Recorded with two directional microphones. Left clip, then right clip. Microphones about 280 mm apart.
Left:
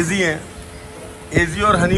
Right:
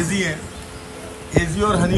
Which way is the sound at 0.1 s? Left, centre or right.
Centre.